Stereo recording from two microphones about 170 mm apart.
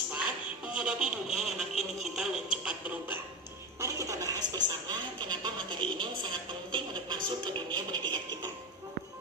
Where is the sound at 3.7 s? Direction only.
20° right (ahead or behind).